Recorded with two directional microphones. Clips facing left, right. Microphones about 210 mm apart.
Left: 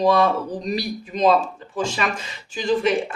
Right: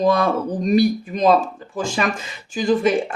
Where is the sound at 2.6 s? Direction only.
50° right (ahead or behind).